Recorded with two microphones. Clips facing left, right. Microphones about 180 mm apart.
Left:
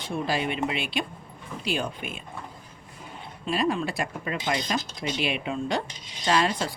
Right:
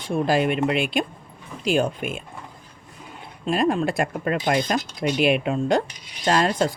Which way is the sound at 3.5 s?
50° right (ahead or behind).